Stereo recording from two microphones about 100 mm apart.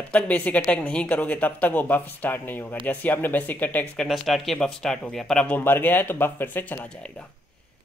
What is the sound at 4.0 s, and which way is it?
Speech, centre (ahead or behind).